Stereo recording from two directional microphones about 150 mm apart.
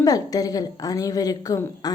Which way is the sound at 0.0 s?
25° left (ahead or behind).